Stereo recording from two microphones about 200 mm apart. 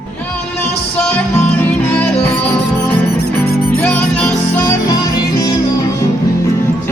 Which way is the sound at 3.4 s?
50° left (ahead or behind).